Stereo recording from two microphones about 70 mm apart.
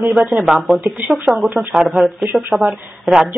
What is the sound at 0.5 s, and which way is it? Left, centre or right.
Speech, centre.